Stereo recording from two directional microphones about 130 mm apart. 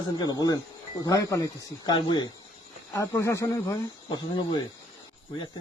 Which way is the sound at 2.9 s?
20° left (ahead or behind).